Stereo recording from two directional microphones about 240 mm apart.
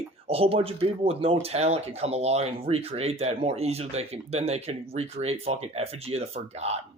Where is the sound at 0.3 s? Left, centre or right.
Right.